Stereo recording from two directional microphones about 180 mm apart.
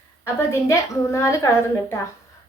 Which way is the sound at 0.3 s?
15° left (ahead or behind).